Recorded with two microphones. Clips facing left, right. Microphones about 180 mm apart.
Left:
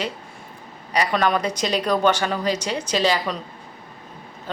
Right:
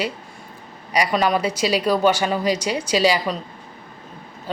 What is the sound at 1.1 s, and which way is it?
A woman's voice, 5° right (ahead or behind).